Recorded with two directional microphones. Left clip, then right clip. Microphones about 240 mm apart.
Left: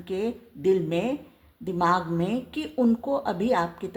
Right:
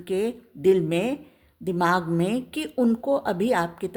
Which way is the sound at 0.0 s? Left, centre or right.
Right.